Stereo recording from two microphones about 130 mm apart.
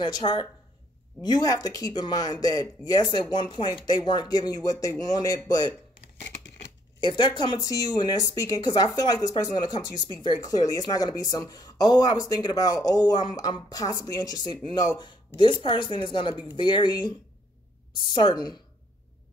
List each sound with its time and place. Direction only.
0.0 s a woman's voice: 35° left (ahead or behind)
7.0 s a woman's voice: 35° left (ahead or behind)